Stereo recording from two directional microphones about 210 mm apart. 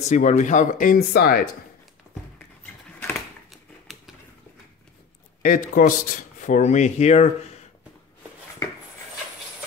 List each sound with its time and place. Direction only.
0.0 s speech: 35° left (ahead or behind)
2.3 s a sound: 5° left (ahead or behind)
5.4 s speech: 40° left (ahead or behind)